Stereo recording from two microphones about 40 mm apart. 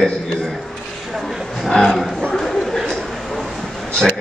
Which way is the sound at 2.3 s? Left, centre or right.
Centre.